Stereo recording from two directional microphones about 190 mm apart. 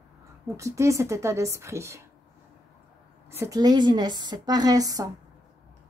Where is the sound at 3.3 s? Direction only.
15° right (ahead or behind).